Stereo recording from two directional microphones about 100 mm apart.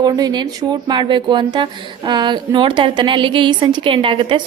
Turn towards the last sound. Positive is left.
turn(degrees=-60)  # may be behind; listen again after turning